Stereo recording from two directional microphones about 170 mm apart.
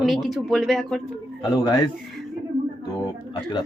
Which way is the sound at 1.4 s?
25° left (ahead or behind).